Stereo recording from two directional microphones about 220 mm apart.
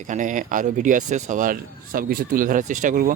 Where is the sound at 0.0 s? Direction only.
35° right (ahead or behind).